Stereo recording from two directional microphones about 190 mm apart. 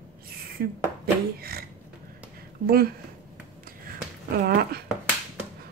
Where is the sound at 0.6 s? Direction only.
50° right (ahead or behind).